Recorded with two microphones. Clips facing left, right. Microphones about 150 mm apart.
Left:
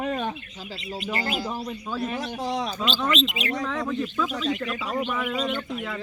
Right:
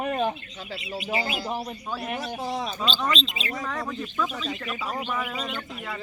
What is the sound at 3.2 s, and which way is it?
Speech, 30° right (ahead or behind).